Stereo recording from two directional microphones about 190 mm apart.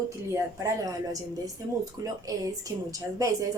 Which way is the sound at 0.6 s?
20° right (ahead or behind).